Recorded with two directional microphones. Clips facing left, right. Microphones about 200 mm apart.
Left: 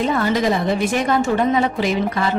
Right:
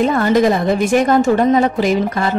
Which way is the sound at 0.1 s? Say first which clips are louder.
Right 5 dB; 50° right (ahead or behind).